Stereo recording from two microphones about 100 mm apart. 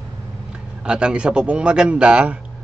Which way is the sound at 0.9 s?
10° right (ahead or behind).